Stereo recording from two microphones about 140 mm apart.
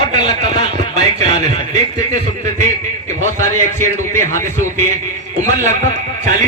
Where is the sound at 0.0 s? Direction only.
55° right (ahead or behind).